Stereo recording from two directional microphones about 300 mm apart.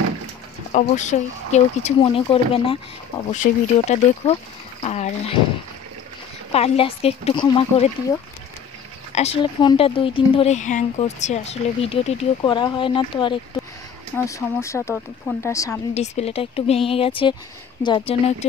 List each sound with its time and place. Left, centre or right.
0.7 s speech: left
4.8 s a sound: left
6.5 s speech: centre
9.1 s speech: centre